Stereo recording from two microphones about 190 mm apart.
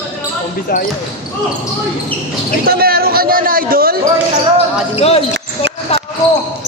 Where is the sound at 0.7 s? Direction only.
50° left (ahead or behind).